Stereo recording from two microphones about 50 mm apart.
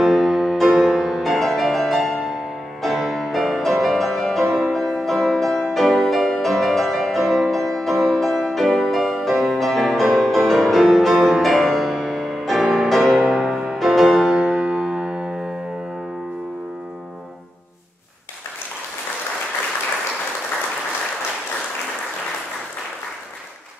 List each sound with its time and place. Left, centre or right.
0.0 s music: centre
14.6 s music: centre